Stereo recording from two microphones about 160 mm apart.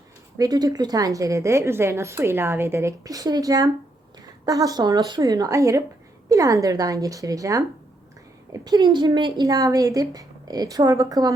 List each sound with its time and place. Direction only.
0.3 s a woman's voice: 25° right (ahead or behind)
8.6 s a woman's voice: 25° right (ahead or behind)